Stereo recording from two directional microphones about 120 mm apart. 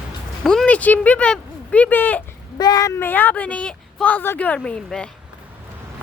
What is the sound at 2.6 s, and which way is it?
Speech, 30° left (ahead or behind).